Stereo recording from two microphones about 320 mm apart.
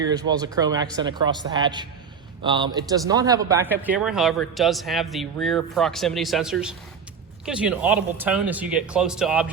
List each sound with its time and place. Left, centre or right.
0.0 s speech: centre